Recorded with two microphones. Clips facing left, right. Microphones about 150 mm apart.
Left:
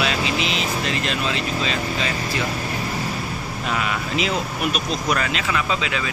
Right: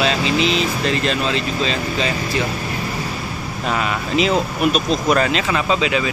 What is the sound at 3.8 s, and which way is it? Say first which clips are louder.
Speech: right 6 dB; 35° right (ahead or behind).